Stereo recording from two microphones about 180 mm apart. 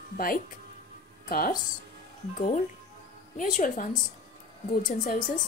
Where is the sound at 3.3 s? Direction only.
45° left (ahead or behind).